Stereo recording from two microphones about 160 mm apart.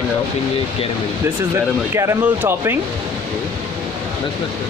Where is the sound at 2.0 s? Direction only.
15° right (ahead or behind).